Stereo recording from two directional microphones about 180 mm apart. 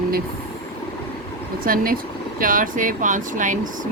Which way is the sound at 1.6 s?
50° right (ahead or behind).